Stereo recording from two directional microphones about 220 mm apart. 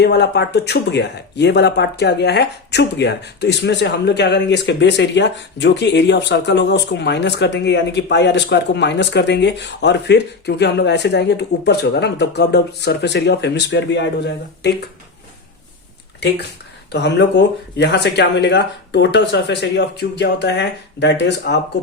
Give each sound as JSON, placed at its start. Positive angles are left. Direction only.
{"t": 0.0, "sound": "speech", "side_deg": 50}
{"t": 16.9, "sound": "speech", "side_deg": 50}